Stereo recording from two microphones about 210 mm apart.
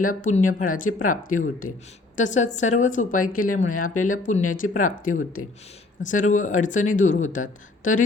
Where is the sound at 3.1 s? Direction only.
90° left.